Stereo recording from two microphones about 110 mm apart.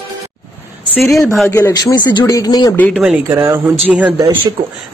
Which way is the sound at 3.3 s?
25° right (ahead or behind).